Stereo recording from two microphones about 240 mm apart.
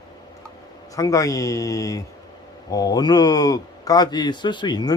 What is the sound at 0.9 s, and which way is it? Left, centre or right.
Speech, centre.